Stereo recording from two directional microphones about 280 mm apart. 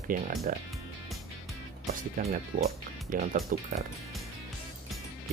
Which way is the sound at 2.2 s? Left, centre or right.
Right.